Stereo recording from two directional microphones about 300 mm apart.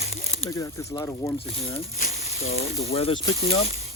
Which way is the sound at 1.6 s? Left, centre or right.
Left.